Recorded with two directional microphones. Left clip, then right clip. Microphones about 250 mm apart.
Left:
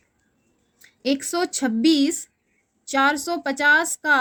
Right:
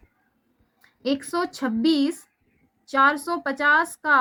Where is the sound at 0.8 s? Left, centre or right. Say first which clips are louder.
Left 2 dB; left.